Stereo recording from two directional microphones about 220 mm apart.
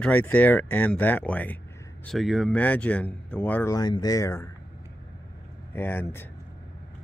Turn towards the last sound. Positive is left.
turn(degrees=10)  # may be behind; listen again after turning